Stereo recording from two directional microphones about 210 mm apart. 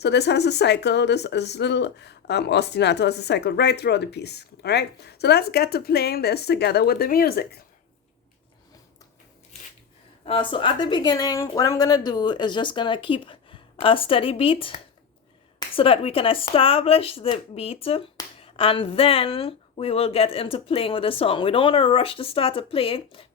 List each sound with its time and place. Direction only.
0.0 s speech: 55° left (ahead or behind)
10.2 s speech: 25° left (ahead or behind)